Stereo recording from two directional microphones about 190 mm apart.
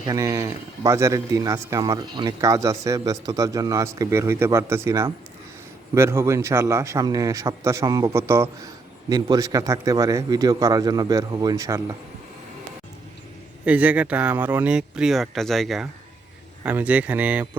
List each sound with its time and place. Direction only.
0.0 s a man's voice: 15° right (ahead or behind)
13.7 s a man's voice: 5° right (ahead or behind)